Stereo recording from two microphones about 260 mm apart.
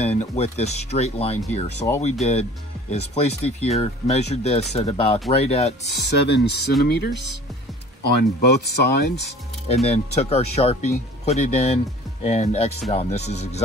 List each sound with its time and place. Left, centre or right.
0.0 s speech: left
2.9 s speech: left
5.9 s speech: left
9.8 s speech: left